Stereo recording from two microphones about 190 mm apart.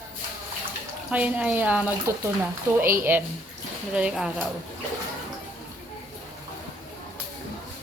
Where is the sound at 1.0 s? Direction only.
5° right (ahead or behind).